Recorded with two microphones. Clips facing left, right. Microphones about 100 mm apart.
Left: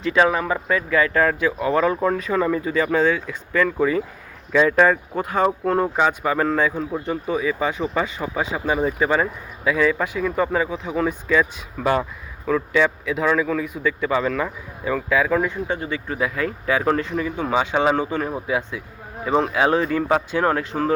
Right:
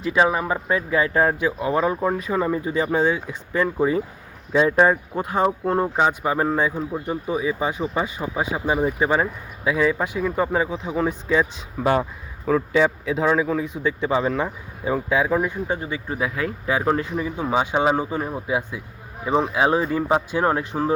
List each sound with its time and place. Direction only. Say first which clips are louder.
0.0 s speech: left 1 dB; 10° right (ahead or behind)
12.5 s speech: right 1 dB; 35° right (ahead or behind); by 18.2 s 10° right (ahead or behind)
18.8 s speech: left 2 dB; 70° left (ahead or behind)
19.3 s speech: left 1 dB; 10° right (ahead or behind)